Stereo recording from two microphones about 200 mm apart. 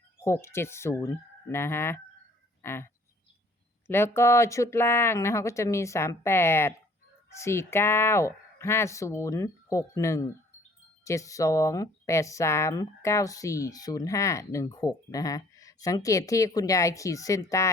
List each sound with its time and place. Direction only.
0.3 s speech: 15° left (ahead or behind)